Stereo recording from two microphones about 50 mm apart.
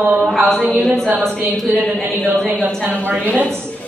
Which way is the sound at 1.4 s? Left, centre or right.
Right.